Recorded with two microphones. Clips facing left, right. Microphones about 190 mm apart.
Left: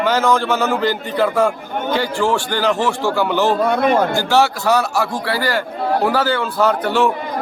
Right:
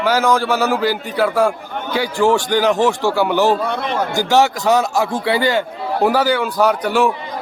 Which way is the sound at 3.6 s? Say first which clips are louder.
Left 5 dB; 50° left (ahead or behind).